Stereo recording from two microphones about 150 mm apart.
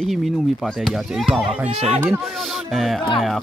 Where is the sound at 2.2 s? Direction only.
Centre (ahead or behind).